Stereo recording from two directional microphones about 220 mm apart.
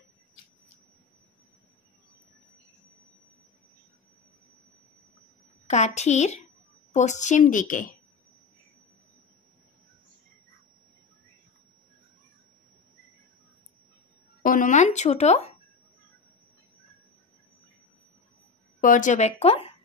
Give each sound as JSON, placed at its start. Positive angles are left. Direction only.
{"t": 5.7, "sound": "speech", "side_deg": 30}
{"t": 14.4, "sound": "a sound", "side_deg": 40}
{"t": 18.8, "sound": "speech", "side_deg": 35}